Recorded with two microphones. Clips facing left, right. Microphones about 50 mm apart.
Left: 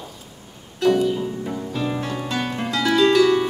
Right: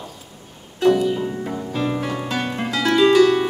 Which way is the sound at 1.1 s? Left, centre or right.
Centre.